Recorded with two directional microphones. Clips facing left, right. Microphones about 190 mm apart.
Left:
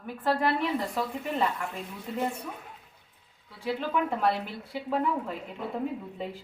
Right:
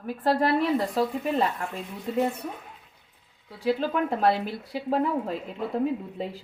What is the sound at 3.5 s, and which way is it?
A woman's voice, 40° right (ahead or behind).